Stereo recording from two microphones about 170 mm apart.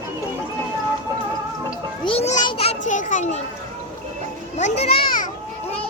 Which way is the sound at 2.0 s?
35° left (ahead or behind).